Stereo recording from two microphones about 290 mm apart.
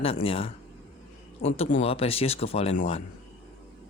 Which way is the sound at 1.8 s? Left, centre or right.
Centre.